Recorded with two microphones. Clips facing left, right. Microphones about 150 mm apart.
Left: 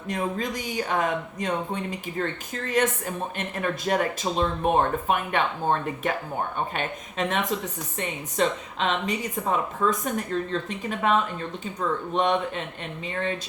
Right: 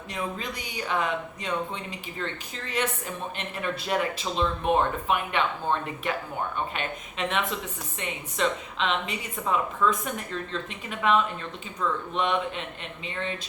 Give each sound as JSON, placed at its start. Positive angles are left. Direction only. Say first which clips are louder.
{"t": 0.1, "sound": "speech", "louder": "left 5 dB", "side_deg": 45}